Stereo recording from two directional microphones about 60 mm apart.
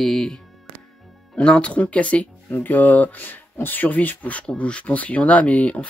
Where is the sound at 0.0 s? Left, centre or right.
Centre.